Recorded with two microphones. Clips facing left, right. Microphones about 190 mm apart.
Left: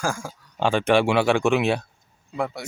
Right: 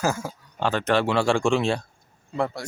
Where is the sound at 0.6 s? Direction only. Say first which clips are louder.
Left 3 dB; 10° left (ahead or behind).